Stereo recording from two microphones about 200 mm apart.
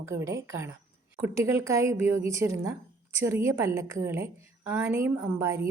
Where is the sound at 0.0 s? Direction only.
15° right (ahead or behind).